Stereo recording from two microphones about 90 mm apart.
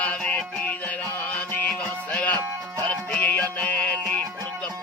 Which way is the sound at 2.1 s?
20° left (ahead or behind).